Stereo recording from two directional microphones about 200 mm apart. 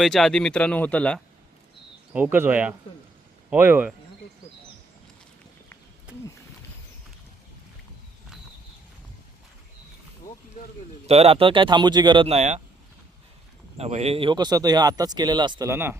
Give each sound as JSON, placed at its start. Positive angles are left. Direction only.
{"t": 0.0, "sound": "speech", "side_deg": 0}
{"t": 2.1, "sound": "speech", "side_deg": -10}
{"t": 11.0, "sound": "speech", "side_deg": -30}
{"t": 13.7, "sound": "speech", "side_deg": -30}